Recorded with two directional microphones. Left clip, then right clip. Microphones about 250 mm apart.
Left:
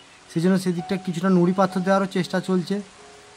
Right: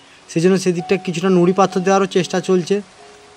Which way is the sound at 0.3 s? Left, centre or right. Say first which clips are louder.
Right 8 dB; centre.